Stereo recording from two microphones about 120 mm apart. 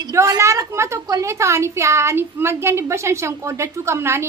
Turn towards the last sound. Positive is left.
turn(degrees=-20)  # may be behind; listen again after turning